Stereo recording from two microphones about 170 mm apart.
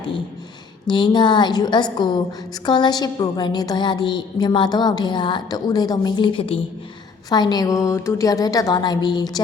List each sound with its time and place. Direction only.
0.9 s a woman's voice: 25° left (ahead or behind)